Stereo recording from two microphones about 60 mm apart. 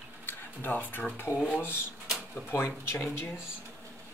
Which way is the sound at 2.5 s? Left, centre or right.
Left.